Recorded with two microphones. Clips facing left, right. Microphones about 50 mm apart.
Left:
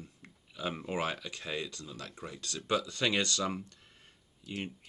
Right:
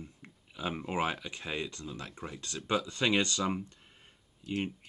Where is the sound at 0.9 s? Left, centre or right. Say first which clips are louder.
Right 3 dB; centre.